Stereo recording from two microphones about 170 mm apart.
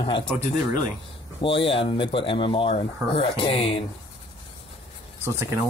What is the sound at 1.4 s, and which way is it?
Speech, 30° left (ahead or behind).